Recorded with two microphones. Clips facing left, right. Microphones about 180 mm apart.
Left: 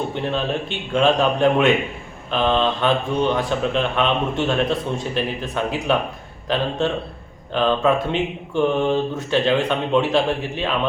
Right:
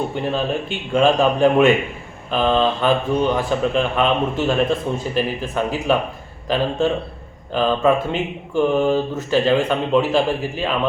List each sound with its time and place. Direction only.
0.1 s a man's voice: 5° right (ahead or behind)